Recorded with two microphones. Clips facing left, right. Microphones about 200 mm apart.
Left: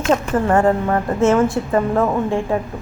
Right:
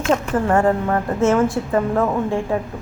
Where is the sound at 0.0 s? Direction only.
25° left (ahead or behind).